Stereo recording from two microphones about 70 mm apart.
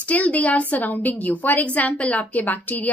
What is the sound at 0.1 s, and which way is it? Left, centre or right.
A woman's voice, left.